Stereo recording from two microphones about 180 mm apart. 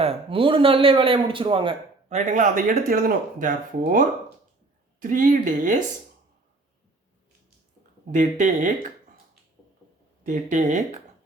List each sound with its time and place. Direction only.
0.0 s a man's voice: 30° right (ahead or behind)
2.0 s speech: 40° right (ahead or behind)
8.1 s speech: 45° right (ahead or behind)
10.2 s speech: 45° right (ahead or behind)